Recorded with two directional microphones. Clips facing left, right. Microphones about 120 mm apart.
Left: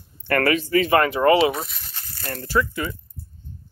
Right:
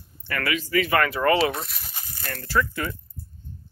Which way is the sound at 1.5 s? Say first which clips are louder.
Left 3 dB; centre (ahead or behind).